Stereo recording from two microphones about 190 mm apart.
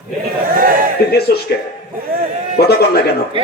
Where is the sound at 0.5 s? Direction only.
45° right (ahead or behind).